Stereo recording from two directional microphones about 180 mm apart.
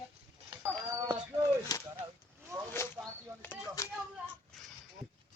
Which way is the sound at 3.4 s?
15° left (ahead or behind).